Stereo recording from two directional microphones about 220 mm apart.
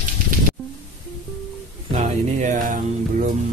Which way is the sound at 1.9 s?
35° right (ahead or behind).